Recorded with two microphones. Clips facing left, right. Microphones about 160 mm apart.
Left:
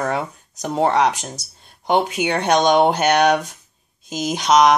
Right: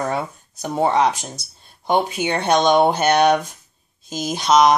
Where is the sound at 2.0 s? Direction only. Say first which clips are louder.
Left 1 dB; 10° left (ahead or behind).